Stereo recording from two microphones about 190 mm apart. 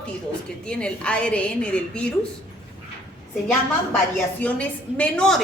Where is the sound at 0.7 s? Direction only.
5° left (ahead or behind).